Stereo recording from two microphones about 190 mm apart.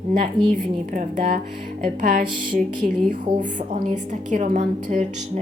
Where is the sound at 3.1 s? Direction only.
40° right (ahead or behind).